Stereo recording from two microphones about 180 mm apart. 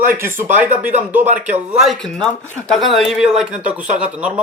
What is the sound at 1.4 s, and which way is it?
Speech, 10° right (ahead or behind).